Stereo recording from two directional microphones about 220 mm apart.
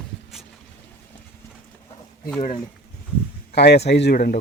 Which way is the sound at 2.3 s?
35° left (ahead or behind).